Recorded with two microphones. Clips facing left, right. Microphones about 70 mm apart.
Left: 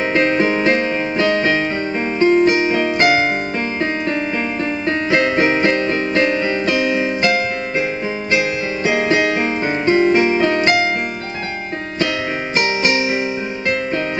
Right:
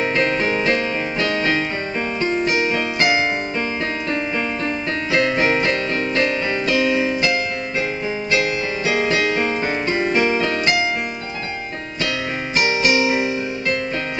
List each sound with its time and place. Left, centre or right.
0.1 s music: centre
1.1 s music: centre
2.1 s music: left
4.8 s music: centre
5.4 s keyboard: centre
6.2 s music: centre
8.3 s keyboard: centre
10.6 s music: left